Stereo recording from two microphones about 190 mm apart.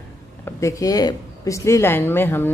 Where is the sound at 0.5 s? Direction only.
15° left (ahead or behind).